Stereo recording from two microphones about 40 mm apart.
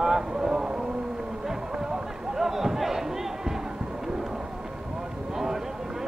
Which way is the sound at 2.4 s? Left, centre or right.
Centre.